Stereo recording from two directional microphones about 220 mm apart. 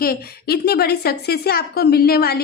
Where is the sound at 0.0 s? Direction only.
45° left (ahead or behind).